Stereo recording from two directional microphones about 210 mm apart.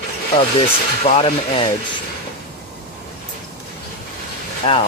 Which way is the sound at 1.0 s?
30° left (ahead or behind).